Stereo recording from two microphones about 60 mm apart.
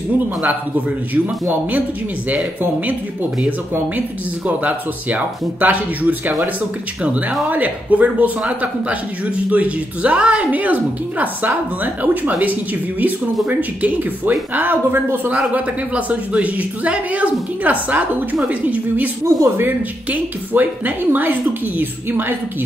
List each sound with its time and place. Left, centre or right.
0.4 s speech: right
2.6 s speech: right
4.5 s speech: right
15.5 s speech: right
19.4 s speech: right
20.1 s speech: right